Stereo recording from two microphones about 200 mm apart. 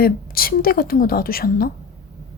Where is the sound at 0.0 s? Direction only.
45° left (ahead or behind).